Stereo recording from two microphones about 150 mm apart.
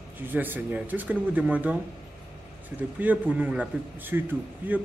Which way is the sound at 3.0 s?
10° right (ahead or behind).